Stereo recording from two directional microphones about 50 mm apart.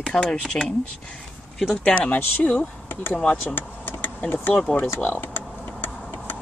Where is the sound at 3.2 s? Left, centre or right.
Centre.